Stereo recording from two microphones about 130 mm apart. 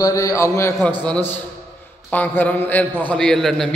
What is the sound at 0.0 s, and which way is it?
A man's voice, 25° left (ahead or behind).